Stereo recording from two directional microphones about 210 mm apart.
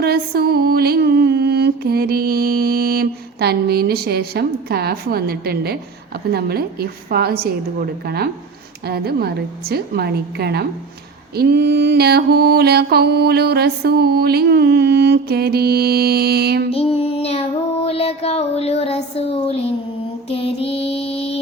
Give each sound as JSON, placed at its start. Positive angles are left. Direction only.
{"t": 0.0, "sound": "music", "side_deg": -50}
{"t": 6.3, "sound": "mantra", "side_deg": -50}
{"t": 16.7, "sound": "child singing", "side_deg": 30}
{"t": 20.3, "sound": "music", "side_deg": 25}